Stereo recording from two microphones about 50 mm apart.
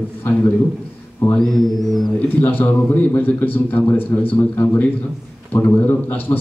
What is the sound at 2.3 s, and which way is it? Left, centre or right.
Speech, left.